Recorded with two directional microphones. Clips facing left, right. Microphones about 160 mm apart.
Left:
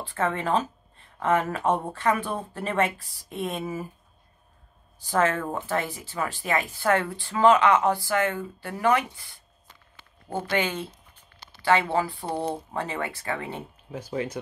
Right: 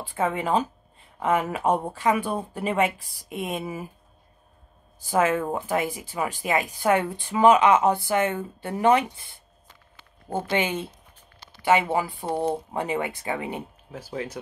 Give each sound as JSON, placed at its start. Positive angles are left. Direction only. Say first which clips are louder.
{"t": 0.0, "sound": "speech", "louder": "right 1 dB", "side_deg": -10}
{"t": 5.1, "sound": "speech", "louder": "right 2 dB", "side_deg": -10}
{"t": 13.9, "sound": "speech", "louder": "left 2 dB", "side_deg": -5}